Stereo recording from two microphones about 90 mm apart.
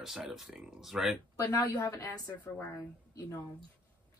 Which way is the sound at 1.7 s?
30° left (ahead or behind).